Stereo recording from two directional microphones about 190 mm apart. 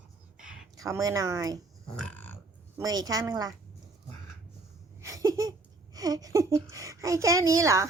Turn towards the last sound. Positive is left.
turn(degrees=-15)  # may be behind; listen again after turning